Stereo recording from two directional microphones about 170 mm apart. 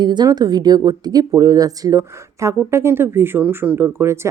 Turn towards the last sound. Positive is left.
turn(degrees=-15)  # may be behind; listen again after turning